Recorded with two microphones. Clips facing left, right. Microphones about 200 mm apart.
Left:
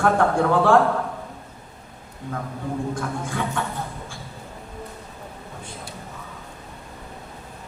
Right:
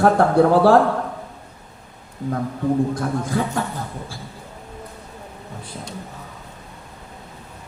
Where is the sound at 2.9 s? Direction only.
40° right (ahead or behind).